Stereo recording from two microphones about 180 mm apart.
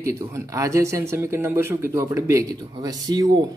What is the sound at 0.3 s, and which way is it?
Speech, 15° right (ahead or behind).